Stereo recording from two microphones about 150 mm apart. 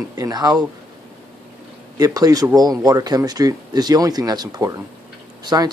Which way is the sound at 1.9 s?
25° right (ahead or behind).